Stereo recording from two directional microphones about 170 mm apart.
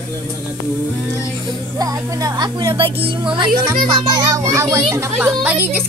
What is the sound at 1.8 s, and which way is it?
Speech, 20° right (ahead or behind).